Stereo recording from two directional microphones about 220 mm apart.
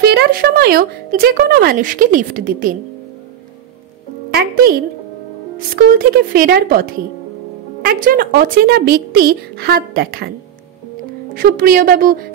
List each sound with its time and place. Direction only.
0.0 s speech: 45° right (ahead or behind)
4.3 s speech: 45° right (ahead or behind)
11.3 s speech: 45° right (ahead or behind)